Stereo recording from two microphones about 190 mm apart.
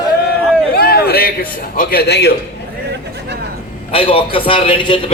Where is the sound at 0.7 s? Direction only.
55° left (ahead or behind).